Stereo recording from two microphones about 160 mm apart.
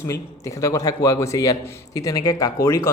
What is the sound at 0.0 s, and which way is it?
A man's voice, 20° left (ahead or behind).